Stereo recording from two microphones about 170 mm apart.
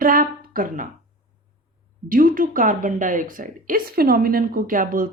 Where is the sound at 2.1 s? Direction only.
55° right (ahead or behind).